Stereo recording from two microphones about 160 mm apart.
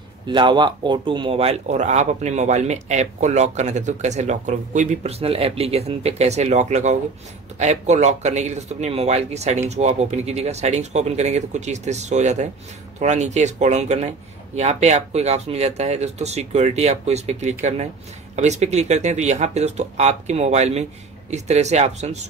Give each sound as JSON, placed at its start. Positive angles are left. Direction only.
{"t": 0.3, "sound": "speech", "side_deg": -30}